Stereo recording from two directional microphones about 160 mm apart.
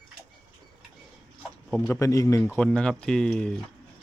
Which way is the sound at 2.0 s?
20° left (ahead or behind).